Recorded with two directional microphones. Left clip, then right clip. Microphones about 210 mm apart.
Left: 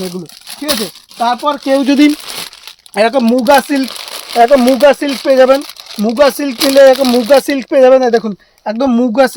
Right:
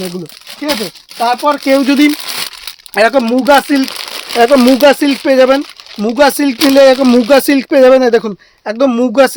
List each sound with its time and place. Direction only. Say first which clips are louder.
1.2 s speech: right 2 dB; 25° right (ahead or behind)
1.9 s speech: even; centre (ahead or behind)
2.9 s speech: right 1 dB; 15° right (ahead or behind); by 5.3 s 40° right (ahead or behind)
5.3 s speech: left 2 dB; 25° right (ahead or behind)